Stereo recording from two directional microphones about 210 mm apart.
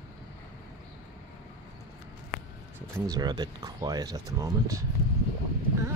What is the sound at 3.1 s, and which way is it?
Speech, 20° right (ahead or behind).